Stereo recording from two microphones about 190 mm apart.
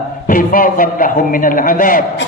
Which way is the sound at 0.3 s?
45° left (ahead or behind).